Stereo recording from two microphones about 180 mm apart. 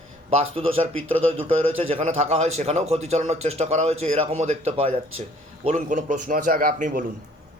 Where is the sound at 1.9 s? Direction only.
40° right (ahead or behind).